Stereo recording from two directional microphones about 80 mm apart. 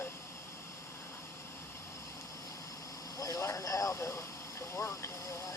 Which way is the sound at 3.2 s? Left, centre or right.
Left.